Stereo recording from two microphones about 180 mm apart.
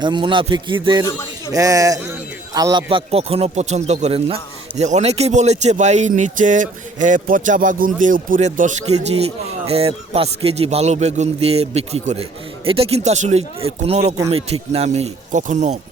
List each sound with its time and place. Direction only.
0.0 s a man's voice: 25° right (ahead or behind)